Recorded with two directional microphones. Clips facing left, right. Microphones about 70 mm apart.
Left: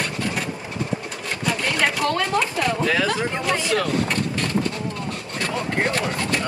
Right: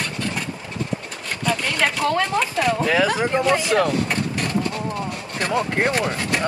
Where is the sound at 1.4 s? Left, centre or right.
Centre.